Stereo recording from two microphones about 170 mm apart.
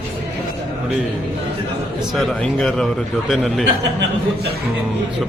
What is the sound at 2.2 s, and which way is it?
A man's voice, 5° left (ahead or behind).